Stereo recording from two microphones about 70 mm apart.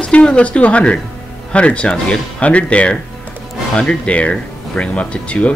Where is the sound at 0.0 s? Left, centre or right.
Centre.